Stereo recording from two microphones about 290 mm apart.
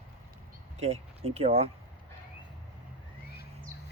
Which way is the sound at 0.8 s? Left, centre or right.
Right.